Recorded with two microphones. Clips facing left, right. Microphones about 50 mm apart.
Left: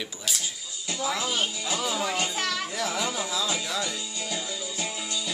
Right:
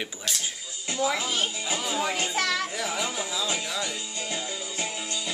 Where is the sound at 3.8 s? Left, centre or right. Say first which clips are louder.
Even; right.